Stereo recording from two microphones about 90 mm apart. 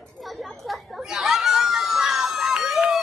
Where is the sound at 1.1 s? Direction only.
5° right (ahead or behind).